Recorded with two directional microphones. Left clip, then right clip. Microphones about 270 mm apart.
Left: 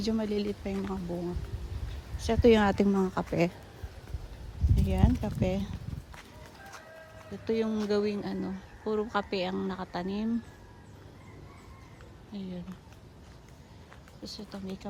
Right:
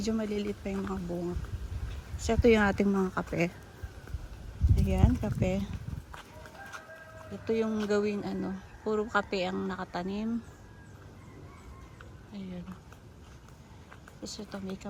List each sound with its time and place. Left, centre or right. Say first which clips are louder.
0.0 s speech: left 1 dB; centre
2.2 s speech: left 1 dB; centre
4.7 s speech: even; centre
7.4 s speech: even; centre
12.3 s speech: left 3 dB; centre
14.3 s speech: right 1 dB; centre